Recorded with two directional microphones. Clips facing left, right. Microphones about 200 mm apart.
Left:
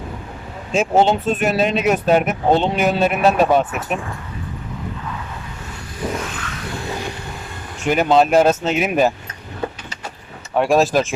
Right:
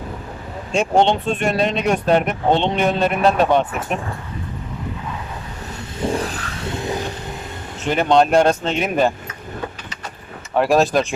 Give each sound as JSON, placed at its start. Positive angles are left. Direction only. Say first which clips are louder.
{"t": 0.7, "sound": "speech", "louder": "left 1 dB", "side_deg": 5}
{"t": 6.1, "sound": "vehicle", "louder": "right 3 dB", "side_deg": -35}
{"t": 7.9, "sound": "speech", "louder": "left 1 dB", "side_deg": 5}
{"t": 10.5, "sound": "speech", "louder": "even", "side_deg": 0}